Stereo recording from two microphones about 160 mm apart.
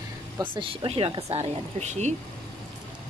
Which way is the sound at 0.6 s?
35° right (ahead or behind).